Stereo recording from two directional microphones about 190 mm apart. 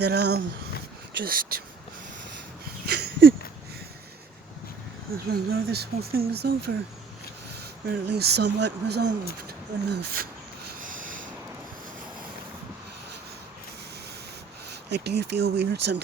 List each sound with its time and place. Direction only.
0.0 s speech: 60° right (ahead or behind)
2.8 s a sound: 60° right (ahead or behind)
5.1 s speech: 55° right (ahead or behind)
8.1 s speech: 60° right (ahead or behind)
10.8 s a sound: 45° right (ahead or behind)
14.8 s speech: 60° right (ahead or behind)